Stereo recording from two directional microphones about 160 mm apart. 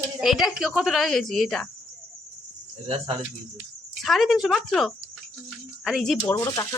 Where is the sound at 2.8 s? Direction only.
35° right (ahead or behind).